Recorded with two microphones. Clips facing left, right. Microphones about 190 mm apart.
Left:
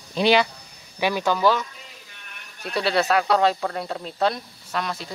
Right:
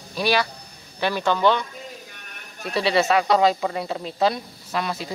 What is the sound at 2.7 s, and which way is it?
Speech, centre (ahead or behind).